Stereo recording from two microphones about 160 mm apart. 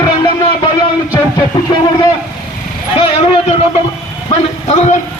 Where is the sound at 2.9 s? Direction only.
35° left (ahead or behind).